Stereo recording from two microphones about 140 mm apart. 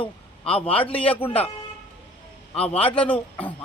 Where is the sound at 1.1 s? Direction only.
15° left (ahead or behind).